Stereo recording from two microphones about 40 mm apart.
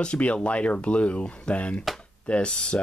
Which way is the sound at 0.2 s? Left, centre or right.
Left.